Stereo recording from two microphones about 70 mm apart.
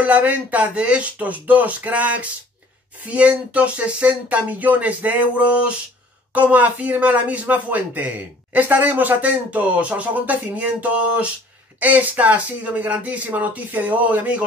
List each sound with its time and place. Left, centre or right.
0.0 s speech: right